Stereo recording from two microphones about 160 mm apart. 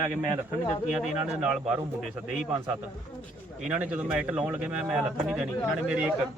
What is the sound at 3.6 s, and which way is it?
A man's voice, 10° right (ahead or behind).